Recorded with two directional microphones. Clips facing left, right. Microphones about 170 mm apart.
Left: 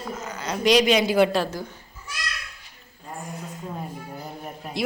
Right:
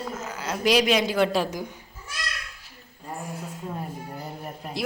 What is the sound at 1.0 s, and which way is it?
Speech, 10° left (ahead or behind).